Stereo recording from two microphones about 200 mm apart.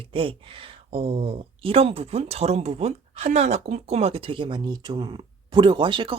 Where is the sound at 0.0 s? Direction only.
25° right (ahead or behind).